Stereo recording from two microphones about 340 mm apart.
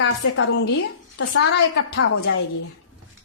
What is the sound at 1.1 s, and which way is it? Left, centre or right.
A man's voice, left.